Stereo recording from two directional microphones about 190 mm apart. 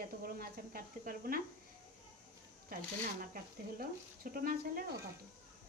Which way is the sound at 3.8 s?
50° right (ahead or behind).